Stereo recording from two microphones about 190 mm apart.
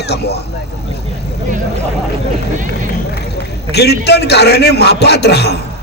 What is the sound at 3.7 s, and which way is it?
A man's voice, 60° left (ahead or behind).